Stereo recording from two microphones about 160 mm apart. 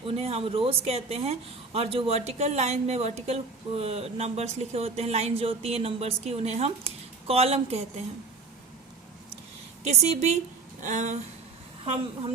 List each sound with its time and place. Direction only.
0.0 s a woman's voice: 40° right (ahead or behind)
9.8 s a woman's voice: 40° right (ahead or behind)